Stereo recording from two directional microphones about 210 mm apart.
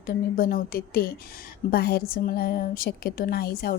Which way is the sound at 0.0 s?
45° left (ahead or behind).